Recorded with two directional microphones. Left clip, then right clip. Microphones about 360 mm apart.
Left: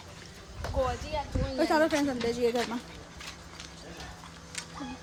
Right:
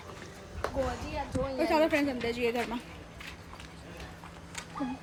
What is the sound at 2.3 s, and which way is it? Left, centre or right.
Speech, left.